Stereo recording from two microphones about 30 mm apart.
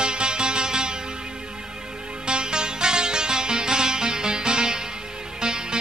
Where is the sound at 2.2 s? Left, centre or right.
Right.